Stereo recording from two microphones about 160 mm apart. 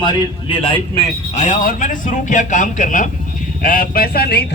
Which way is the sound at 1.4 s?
55° left (ahead or behind).